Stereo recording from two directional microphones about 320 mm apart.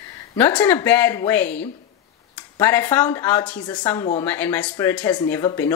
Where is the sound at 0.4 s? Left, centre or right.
Centre.